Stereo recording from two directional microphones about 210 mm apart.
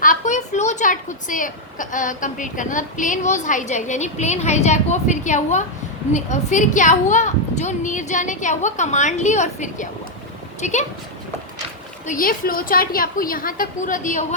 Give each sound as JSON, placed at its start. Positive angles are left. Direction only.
{"t": 0.0, "sound": "a woman's voice", "side_deg": 40}
{"t": 12.0, "sound": "a woman's voice", "side_deg": 40}